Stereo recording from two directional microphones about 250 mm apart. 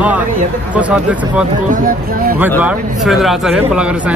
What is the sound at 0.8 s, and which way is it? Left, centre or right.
Speech, centre.